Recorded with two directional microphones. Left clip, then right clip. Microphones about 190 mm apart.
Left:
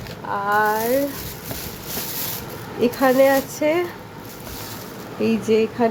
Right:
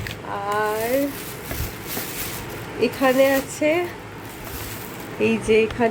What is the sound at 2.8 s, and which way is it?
Speech, 15° left (ahead or behind).